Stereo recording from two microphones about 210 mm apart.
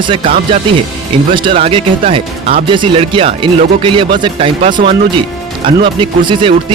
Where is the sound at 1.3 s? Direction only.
25° right (ahead or behind).